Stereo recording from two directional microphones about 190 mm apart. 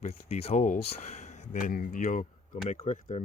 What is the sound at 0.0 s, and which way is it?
Speech, 35° left (ahead or behind).